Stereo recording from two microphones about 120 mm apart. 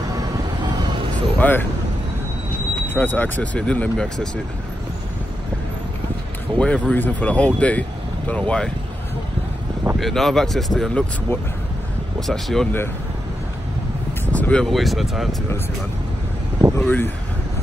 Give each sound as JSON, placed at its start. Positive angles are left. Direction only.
{"t": 1.1, "sound": "vehicle", "side_deg": 15}
{"t": 2.9, "sound": "speech", "side_deg": 15}
{"t": 6.6, "sound": "speech", "side_deg": 10}
{"t": 9.9, "sound": "speech", "side_deg": 0}
{"t": 14.3, "sound": "speech", "side_deg": 10}
{"t": 16.7, "sound": "speech", "side_deg": 15}